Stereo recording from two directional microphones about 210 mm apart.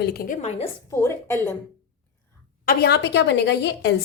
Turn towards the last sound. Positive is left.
turn(degrees=55)  # may be behind; listen again after turning